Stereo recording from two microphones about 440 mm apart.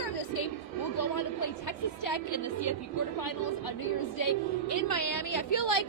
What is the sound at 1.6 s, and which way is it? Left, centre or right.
A woman's voice, left.